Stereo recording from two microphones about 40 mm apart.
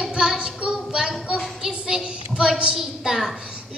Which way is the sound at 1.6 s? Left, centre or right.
Centre.